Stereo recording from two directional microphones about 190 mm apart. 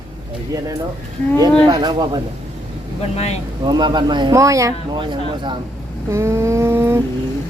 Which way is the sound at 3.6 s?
25° right (ahead or behind).